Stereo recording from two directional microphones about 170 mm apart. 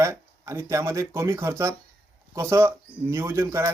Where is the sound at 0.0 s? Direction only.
15° right (ahead or behind).